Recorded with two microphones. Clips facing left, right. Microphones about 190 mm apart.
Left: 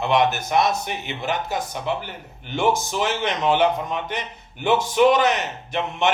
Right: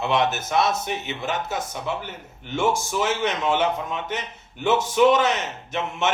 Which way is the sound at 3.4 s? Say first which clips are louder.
Left 3 dB; 15° left (ahead or behind).